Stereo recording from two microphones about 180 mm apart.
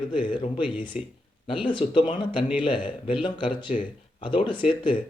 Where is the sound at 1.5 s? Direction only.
25° left (ahead or behind).